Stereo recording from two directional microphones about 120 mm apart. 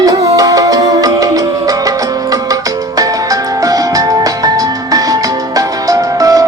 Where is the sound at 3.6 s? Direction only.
30° right (ahead or behind).